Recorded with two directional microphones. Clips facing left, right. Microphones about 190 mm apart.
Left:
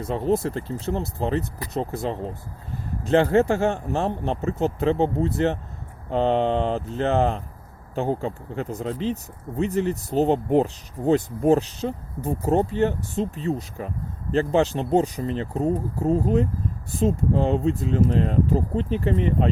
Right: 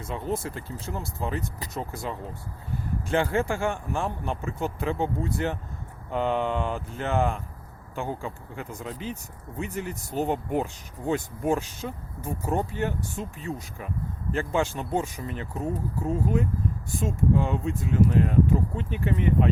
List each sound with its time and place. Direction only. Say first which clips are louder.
0.0 s speech: left 8 dB; 30° left (ahead or behind)
4.0 s speech: left 6 dB; 25° left (ahead or behind)
14.8 s speech: left 7 dB; 25° left (ahead or behind)
15.0 s speech: left 7 dB; 40° left (ahead or behind)